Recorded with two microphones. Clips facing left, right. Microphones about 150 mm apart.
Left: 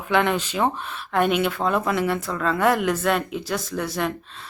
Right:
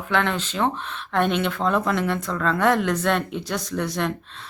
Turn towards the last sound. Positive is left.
turn(degrees=0)  # may be behind; listen again after turning